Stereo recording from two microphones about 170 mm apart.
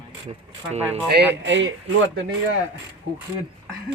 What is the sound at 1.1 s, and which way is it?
Speech, 85° right.